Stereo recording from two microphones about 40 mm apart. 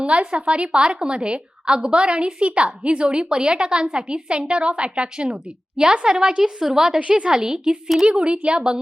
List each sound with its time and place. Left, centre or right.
0.0 s a woman's voice: right
7.0 s a woman's voice: right
7.3 s a woman's voice: centre